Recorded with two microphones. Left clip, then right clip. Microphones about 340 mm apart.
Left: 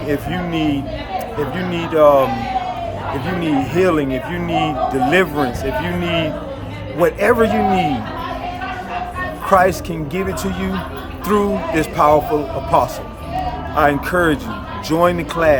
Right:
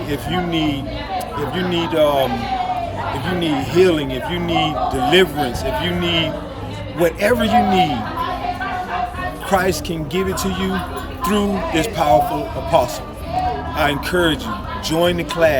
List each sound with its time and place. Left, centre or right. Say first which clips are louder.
0.1 s speech: even; centre
3.4 s speech: right 1 dB; centre
9.5 s speech: left 5 dB; centre
13.7 s speech: left 5 dB; centre